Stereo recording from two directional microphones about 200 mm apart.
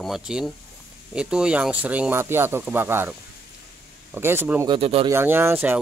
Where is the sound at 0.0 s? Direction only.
5° right (ahead or behind).